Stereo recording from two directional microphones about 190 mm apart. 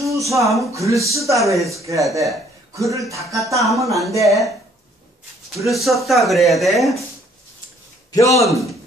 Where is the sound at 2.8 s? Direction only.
15° right (ahead or behind).